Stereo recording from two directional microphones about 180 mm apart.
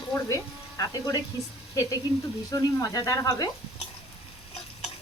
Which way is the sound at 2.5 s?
20° left (ahead or behind).